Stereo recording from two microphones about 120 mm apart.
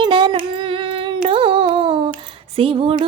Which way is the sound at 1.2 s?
50° right (ahead or behind).